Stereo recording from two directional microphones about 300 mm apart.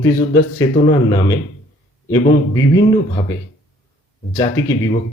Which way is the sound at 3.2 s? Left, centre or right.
Centre.